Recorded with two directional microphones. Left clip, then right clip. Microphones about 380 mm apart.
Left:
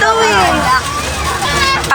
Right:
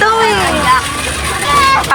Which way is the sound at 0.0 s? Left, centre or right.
Centre.